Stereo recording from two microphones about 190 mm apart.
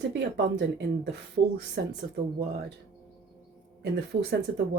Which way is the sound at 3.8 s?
60° right (ahead or behind).